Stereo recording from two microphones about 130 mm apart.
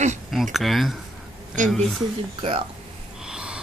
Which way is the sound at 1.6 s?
80° right.